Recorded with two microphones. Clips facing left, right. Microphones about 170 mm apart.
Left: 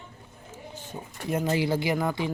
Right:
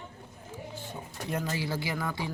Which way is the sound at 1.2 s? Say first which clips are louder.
Left 7 dB; 20° left (ahead or behind).